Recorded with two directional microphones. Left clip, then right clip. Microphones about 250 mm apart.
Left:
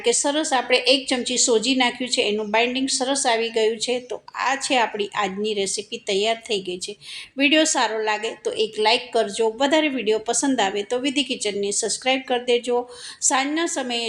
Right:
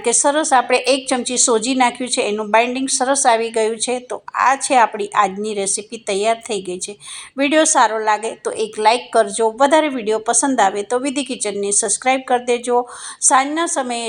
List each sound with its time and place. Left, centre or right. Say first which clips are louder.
0.0 s speech: right 5 dB; centre